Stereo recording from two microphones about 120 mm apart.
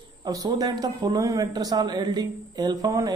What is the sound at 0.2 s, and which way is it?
A man's voice, 30° right (ahead or behind).